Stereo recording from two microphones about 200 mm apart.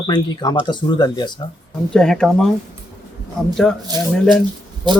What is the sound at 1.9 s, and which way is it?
Speech, 5° left (ahead or behind).